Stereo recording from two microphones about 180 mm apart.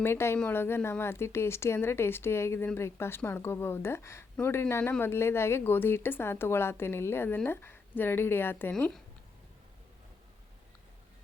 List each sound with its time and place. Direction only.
0.0 s a woman's voice: 15° left (ahead or behind)